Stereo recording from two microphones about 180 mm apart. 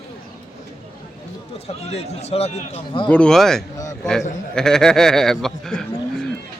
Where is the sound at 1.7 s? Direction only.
35° left (ahead or behind).